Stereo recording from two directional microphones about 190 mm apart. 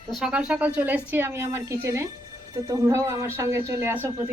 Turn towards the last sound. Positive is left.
turn(degrees=-10)  # may be behind; listen again after turning